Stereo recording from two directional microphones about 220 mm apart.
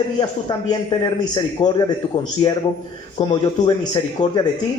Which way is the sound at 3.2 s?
20° left (ahead or behind).